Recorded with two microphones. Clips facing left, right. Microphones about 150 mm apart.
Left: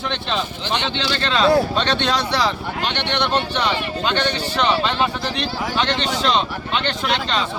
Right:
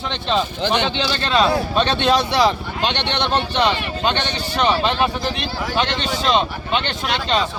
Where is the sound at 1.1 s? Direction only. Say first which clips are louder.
Left 3 dB; 10° right (ahead or behind).